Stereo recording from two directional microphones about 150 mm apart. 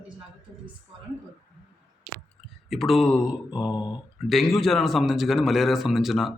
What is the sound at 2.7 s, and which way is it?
Speech, centre (ahead or behind).